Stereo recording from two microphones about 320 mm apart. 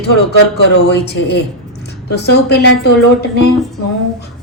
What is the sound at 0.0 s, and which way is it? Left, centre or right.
Speech, left.